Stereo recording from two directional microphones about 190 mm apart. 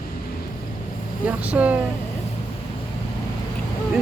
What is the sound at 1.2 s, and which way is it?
Speech, 5° right (ahead or behind).